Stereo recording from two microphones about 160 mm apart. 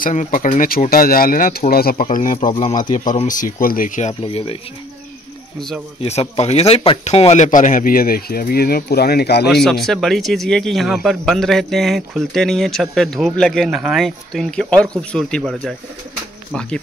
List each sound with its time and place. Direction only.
0.0 s speech: 50° left (ahead or behind); by 2.0 s 70° left (ahead or behind)
2.0 s speech: 55° left (ahead or behind)
4.1 s speech: 35° left (ahead or behind)
5.9 s speech: 40° left (ahead or behind); by 9.5 s 90° left
9.5 s speech: centre (ahead or behind)